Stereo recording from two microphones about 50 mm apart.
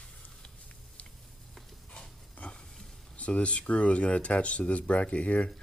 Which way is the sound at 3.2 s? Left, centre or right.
Left.